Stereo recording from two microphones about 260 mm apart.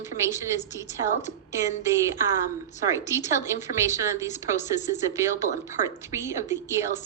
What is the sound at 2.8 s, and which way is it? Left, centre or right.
Speech, centre.